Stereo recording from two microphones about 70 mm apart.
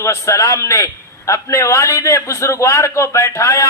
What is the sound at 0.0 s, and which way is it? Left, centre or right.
A man's voice, left.